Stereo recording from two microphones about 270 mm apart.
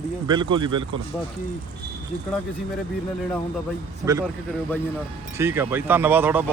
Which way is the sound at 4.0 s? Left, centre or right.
Centre.